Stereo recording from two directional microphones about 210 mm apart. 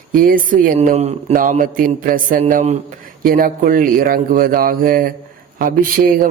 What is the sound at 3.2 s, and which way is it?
Mantra, 40° right (ahead or behind).